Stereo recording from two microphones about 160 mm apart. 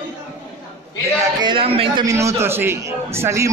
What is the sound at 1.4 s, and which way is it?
Speech, 35° right (ahead or behind).